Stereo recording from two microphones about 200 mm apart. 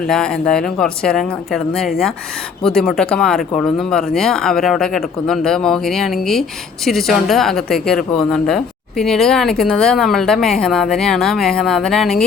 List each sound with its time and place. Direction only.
0.1 s a woman's voice: 5° left (ahead or behind)